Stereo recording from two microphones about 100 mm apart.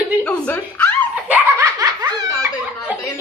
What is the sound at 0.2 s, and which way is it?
Speech, 15° left (ahead or behind).